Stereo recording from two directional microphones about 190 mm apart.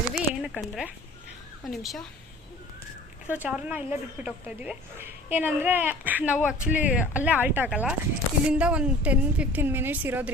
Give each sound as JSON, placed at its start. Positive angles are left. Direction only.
{"t": 0.1, "sound": "a sound", "side_deg": 0}
{"t": 1.6, "sound": "speech", "side_deg": 0}
{"t": 3.2, "sound": "a woman's voice", "side_deg": -10}